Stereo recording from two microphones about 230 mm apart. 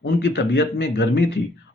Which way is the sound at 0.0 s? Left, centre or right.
Left.